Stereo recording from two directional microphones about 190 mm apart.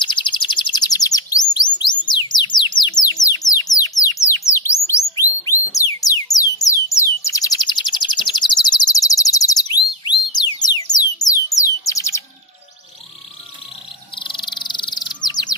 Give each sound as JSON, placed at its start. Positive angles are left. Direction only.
{"t": 0.0, "sound": "chirp", "side_deg": 25}
{"t": 1.8, "sound": "bird", "side_deg": 25}
{"t": 5.7, "sound": "music", "side_deg": 15}
{"t": 11.2, "sound": "bird", "side_deg": 20}
{"t": 14.1, "sound": "bird", "side_deg": 25}
{"t": 15.2, "sound": "chirp", "side_deg": 20}